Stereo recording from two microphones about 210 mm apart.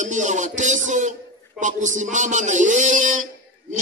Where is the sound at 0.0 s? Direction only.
35° right (ahead or behind).